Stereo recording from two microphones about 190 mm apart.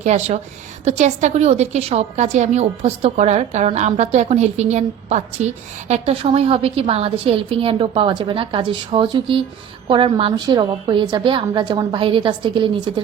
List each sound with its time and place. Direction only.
0.0 s a woman's voice: 35° right (ahead or behind)